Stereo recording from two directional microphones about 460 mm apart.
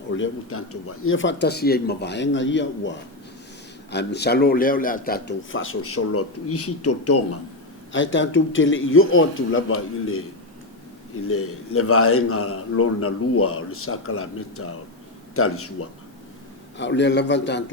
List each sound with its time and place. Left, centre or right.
0.2 s a man's voice: left
3.9 s a man's voice: left
11.3 s a man's voice: left